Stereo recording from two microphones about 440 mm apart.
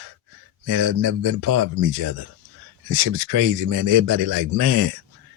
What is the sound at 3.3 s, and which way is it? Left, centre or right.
Speech, right.